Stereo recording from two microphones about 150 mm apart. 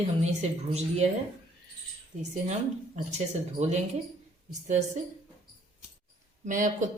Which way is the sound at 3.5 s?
50° right (ahead or behind).